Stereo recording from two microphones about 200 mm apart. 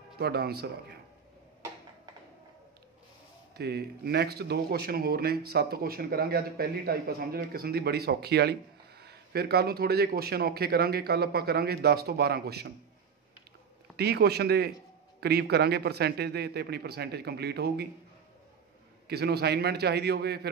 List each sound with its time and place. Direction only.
0.2 s speech: 50° right (ahead or behind)
3.5 s speech: 55° right (ahead or behind)
13.9 s speech: 55° right (ahead or behind)
19.0 s a man's voice: 55° right (ahead or behind)